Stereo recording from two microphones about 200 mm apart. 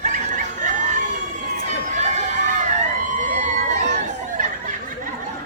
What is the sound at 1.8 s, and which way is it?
Crowd, 35° right (ahead or behind).